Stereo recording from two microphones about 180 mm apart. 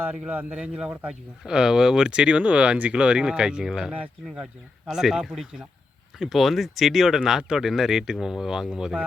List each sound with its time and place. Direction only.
0.0 s speech: 10° right (ahead or behind)